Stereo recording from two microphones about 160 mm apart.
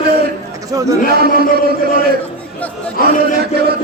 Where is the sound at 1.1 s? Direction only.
75° right (ahead or behind).